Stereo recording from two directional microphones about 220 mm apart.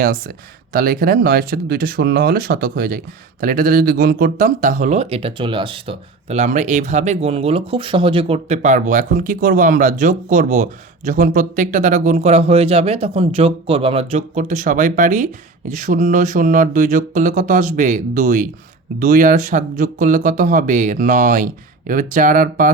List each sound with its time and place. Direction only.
0.0 s speech: 40° right (ahead or behind)